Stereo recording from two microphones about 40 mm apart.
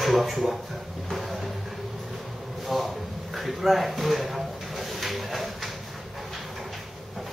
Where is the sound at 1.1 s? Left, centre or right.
Centre.